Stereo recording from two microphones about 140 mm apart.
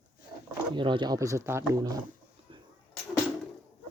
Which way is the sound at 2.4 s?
45° right (ahead or behind).